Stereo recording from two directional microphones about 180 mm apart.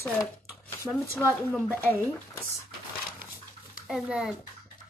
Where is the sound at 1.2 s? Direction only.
10° right (ahead or behind).